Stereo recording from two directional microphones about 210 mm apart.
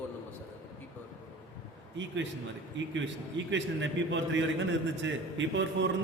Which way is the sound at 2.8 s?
60° right (ahead or behind).